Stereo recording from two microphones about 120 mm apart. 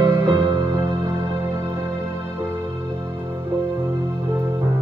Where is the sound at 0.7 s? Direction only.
25° right (ahead or behind).